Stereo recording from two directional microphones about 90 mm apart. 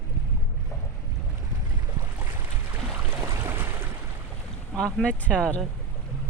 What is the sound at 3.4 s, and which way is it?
Boat, 25° right (ahead or behind).